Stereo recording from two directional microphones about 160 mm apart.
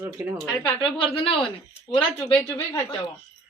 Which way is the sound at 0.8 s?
35° left (ahead or behind).